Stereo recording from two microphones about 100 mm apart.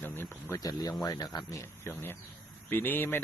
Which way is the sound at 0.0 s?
20° left (ahead or behind).